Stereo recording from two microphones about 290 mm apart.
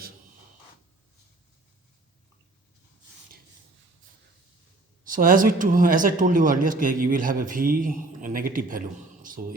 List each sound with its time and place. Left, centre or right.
5.0 s speech: right